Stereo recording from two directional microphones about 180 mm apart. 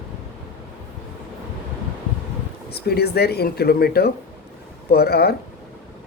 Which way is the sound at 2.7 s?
60° left (ahead or behind).